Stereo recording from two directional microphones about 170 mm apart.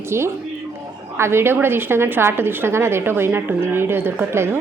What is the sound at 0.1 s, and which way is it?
A woman's voice, 15° right (ahead or behind).